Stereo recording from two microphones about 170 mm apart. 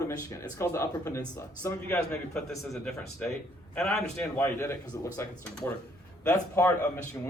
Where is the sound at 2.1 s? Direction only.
5° left (ahead or behind).